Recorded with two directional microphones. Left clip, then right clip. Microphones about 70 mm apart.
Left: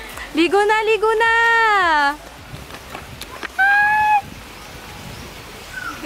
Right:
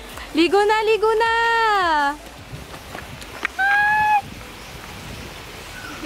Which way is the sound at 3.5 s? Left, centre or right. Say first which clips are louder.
Left 4 dB; left.